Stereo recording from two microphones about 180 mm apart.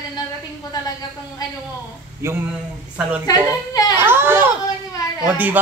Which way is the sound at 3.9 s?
10° right (ahead or behind).